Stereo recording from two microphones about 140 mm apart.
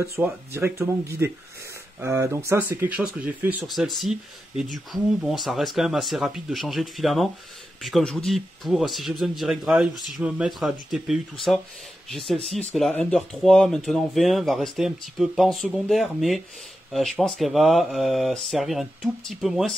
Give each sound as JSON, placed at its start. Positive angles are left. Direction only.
{"t": 0.0, "sound": "speech", "side_deg": -20}